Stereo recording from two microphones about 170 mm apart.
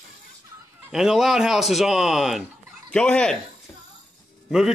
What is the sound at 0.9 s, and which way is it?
Speech, centre (ahead or behind).